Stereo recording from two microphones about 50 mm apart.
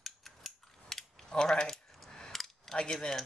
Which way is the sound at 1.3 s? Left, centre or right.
Centre.